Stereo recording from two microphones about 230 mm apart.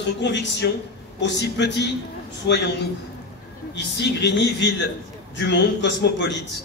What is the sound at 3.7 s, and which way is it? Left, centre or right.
A man's voice, left.